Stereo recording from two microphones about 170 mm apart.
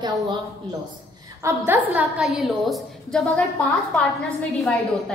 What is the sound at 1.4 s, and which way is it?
A woman's voice, 15° right (ahead or behind).